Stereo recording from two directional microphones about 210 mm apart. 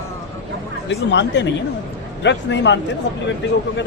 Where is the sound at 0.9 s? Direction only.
55° left (ahead or behind).